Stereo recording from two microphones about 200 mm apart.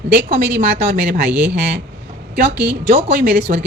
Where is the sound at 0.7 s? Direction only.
45° right (ahead or behind).